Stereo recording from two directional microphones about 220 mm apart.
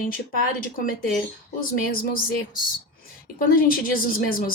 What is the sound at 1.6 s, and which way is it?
Speech, 40° left (ahead or behind).